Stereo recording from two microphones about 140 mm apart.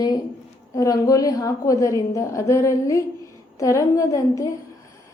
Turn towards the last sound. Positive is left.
turn(degrees=25)  # may be behind; listen again after turning